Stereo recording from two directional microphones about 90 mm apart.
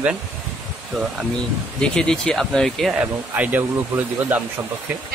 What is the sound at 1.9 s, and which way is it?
Speech, 10° left (ahead or behind).